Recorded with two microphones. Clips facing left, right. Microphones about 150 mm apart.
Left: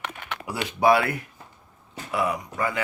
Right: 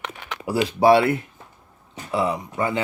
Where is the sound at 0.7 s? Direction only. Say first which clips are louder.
Right 4 dB; 30° right (ahead or behind).